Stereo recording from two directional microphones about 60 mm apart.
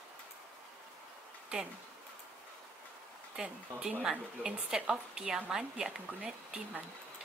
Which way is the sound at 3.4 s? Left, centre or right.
Centre.